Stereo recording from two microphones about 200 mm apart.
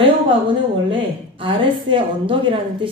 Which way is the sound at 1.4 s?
25° right (ahead or behind).